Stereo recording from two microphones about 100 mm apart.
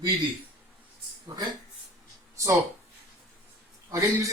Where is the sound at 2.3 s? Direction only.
30° right (ahead or behind).